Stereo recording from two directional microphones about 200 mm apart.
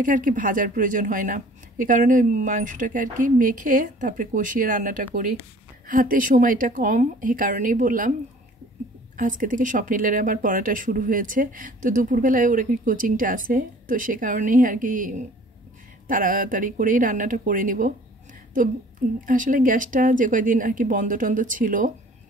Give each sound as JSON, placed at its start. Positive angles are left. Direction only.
{"t": 0.0, "sound": "speech", "side_deg": -40}
{"t": 9.1, "sound": "speech", "side_deg": -40}
{"t": 19.2, "sound": "speech", "side_deg": -40}